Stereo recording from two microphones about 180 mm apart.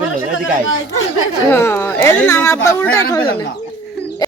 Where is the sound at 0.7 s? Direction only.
90° left.